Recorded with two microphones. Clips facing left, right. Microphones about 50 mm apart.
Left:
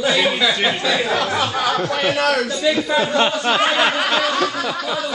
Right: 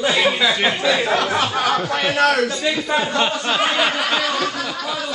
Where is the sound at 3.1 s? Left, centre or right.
Centre.